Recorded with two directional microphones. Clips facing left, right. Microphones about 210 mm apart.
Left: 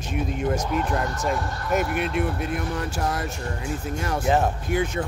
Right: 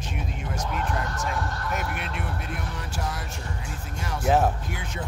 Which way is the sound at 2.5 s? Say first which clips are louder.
Left 7 dB; 50° left (ahead or behind).